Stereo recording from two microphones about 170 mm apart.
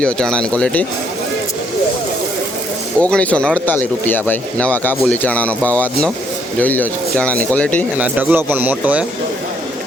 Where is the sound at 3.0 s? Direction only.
10° left (ahead or behind).